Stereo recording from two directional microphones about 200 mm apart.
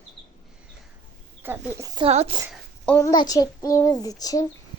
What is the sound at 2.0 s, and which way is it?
Speech, 30° right (ahead or behind).